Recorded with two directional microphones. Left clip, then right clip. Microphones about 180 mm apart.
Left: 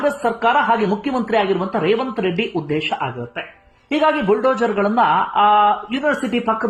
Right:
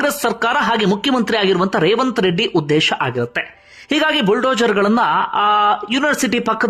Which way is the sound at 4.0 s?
20° right (ahead or behind).